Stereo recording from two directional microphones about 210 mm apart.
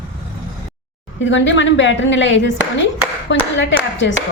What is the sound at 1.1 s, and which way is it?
A woman's voice, 60° left (ahead or behind).